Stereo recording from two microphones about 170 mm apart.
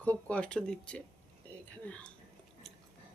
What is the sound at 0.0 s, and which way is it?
Speech, 10° left (ahead or behind).